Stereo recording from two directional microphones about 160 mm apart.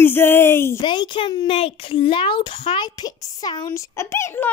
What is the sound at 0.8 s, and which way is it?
A child's voice, 30° left (ahead or behind).